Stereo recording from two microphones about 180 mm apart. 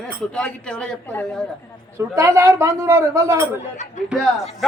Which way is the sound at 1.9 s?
15° right (ahead or behind).